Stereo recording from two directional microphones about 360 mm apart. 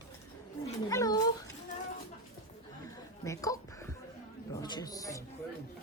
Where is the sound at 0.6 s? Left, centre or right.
Centre.